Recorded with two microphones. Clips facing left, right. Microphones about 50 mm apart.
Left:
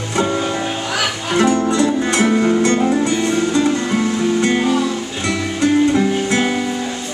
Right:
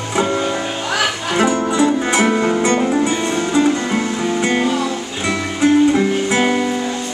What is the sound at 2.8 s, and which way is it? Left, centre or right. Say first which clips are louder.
Music: left 1 dB; centre.